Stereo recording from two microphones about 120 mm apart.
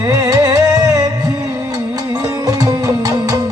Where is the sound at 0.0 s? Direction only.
25° right (ahead or behind).